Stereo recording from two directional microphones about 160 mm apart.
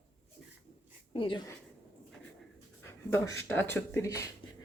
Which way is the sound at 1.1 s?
35° left (ahead or behind).